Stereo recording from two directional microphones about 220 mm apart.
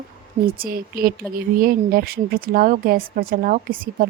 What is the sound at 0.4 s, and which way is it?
A woman's voice, 40° right (ahead or behind).